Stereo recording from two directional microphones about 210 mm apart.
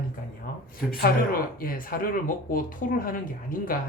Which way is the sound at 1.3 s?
45° left (ahead or behind).